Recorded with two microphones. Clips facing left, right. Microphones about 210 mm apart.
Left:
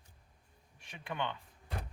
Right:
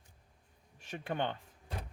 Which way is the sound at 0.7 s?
40° right (ahead or behind).